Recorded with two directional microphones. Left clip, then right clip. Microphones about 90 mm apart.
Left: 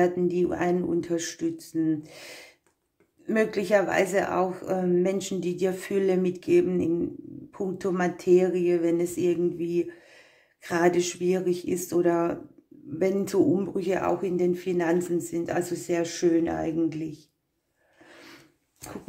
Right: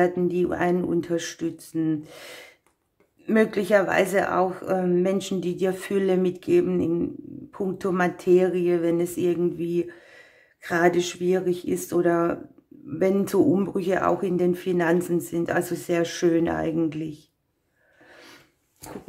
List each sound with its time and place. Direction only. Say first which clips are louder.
0.0 s speech: right 1 dB; 20° right (ahead or behind)
18.1 s filing: right 1 dB; centre (ahead or behind)